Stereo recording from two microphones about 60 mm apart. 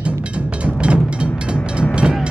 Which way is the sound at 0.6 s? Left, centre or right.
Centre.